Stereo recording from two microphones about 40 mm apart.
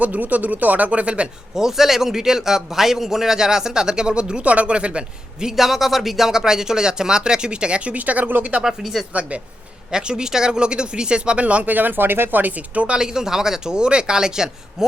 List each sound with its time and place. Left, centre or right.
0.0 s speech: right
1.5 s a man's voice: centre; by 5.5 s right
5.5 s a man's voice: centre; by 7.9 s right
7.9 s speech: right
8.6 s speech: centre
9.3 s speech: right
9.9 s speech: right
12.4 s speech: right
13.0 s a man's voice: centre